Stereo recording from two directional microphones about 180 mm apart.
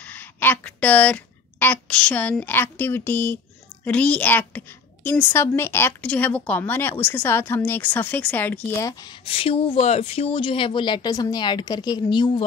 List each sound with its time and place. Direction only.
0.0 s a woman's voice: 10° left (ahead or behind)
9.2 s speech: 30° left (ahead or behind)